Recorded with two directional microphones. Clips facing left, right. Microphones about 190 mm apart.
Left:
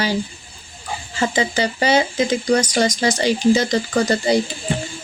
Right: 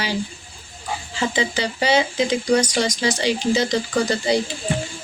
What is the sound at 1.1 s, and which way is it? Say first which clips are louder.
A woman's voice: left 3 dB; 45° left (ahead or behind).